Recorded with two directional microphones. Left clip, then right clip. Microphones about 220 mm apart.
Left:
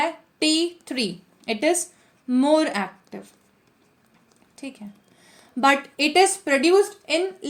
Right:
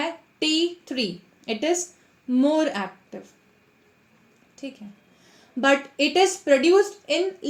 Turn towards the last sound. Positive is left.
turn(degrees=35)  # may be behind; listen again after turning